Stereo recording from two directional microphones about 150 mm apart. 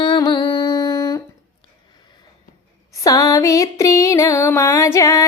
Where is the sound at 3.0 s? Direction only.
25° left (ahead or behind).